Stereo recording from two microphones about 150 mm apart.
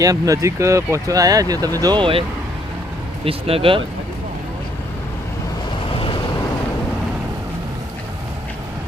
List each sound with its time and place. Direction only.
0.0 s speech: 20° right (ahead or behind)
3.2 s speech: 40° right (ahead or behind)